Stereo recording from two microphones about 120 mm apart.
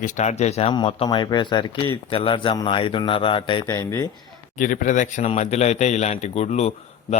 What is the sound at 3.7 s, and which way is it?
Speech, 25° left (ahead or behind).